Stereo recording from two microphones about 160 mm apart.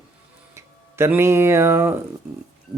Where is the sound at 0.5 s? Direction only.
15° right (ahead or behind).